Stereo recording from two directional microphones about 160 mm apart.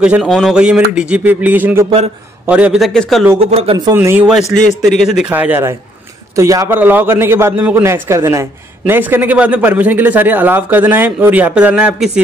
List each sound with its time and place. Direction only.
0.0 s a man's voice: 5° right (ahead or behind)
3.3 s speech: 40° right (ahead or behind)
3.9 s a man's voice: 15° right (ahead or behind)
4.3 s a man's voice: centre (ahead or behind)